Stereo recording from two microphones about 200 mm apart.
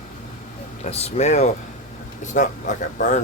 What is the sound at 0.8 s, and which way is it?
Speech, 35° left (ahead or behind).